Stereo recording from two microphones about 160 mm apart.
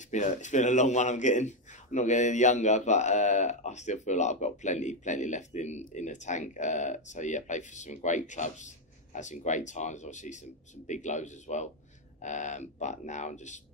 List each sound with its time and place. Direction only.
0.1 s a man's voice: 50° left (ahead or behind)